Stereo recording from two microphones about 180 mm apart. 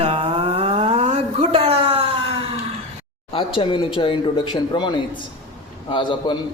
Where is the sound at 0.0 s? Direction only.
30° right (ahead or behind).